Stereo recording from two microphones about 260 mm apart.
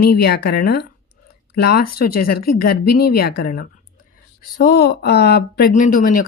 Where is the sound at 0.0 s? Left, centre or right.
Left.